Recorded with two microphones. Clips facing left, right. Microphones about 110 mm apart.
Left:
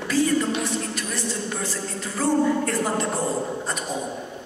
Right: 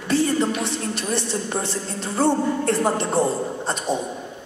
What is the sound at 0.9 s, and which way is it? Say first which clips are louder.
A man's voice: right 4 dB; 25° right (ahead or behind).